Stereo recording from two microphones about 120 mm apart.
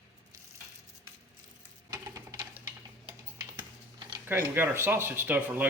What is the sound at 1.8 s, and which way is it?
Sewing machine, 30° right (ahead or behind).